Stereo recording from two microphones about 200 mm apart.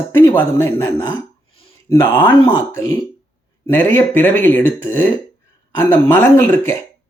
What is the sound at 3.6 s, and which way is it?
Speech, 10° left (ahead or behind).